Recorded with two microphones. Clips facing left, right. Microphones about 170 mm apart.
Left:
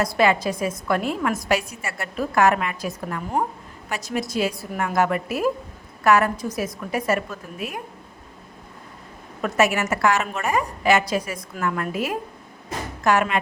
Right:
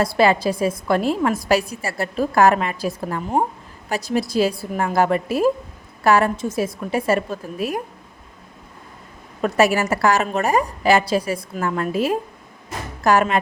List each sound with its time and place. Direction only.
0.0 s a woman's voice: 30° right (ahead or behind)
9.4 s a woman's voice: 35° right (ahead or behind)